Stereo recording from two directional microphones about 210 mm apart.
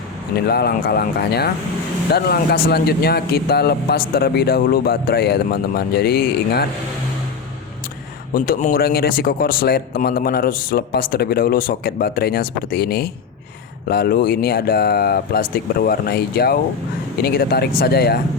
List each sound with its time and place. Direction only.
0.4 s a man's voice: 50° left (ahead or behind)
8.3 s a man's voice: 40° left (ahead or behind)